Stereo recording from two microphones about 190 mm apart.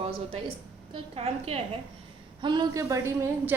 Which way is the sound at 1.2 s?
30° right (ahead or behind).